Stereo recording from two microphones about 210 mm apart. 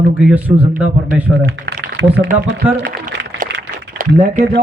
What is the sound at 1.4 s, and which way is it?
Speech, 55° right (ahead or behind).